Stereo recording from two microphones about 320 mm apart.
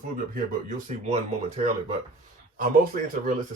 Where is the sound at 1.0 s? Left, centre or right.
Right.